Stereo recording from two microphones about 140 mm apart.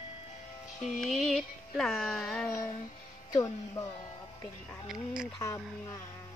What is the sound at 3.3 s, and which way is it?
Music, 25° left (ahead or behind).